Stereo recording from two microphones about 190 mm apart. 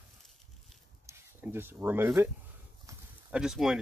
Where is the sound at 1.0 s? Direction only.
15° right (ahead or behind).